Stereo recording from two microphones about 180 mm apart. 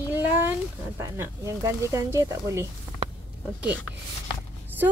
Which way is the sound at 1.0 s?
15° right (ahead or behind).